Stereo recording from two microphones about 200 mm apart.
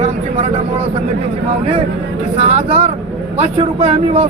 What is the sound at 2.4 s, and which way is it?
Speech, 35° right (ahead or behind).